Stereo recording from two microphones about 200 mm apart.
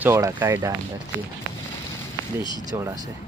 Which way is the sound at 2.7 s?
15° right (ahead or behind).